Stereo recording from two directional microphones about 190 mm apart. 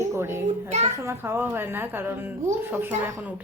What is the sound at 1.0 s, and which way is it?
A woman's voice, 15° right (ahead or behind).